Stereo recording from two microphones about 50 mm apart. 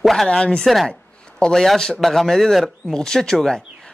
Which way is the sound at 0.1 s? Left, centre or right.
Centre.